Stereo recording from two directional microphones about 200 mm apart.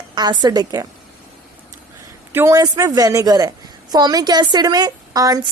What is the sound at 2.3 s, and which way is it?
A woman's voice, 10° right (ahead or behind).